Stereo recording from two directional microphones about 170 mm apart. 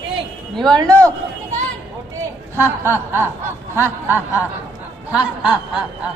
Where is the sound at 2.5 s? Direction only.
15° right (ahead or behind).